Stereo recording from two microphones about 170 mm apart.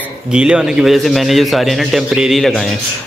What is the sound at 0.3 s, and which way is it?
A man's voice, 5° right (ahead or behind).